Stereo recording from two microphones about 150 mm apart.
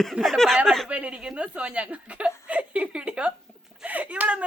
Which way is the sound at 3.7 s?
10° right (ahead or behind).